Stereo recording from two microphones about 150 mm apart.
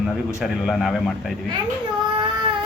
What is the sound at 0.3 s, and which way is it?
Speech, 5° right (ahead or behind).